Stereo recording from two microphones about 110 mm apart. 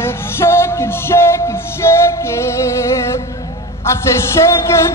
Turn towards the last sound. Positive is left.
turn(degrees=25)  # may be behind; listen again after turning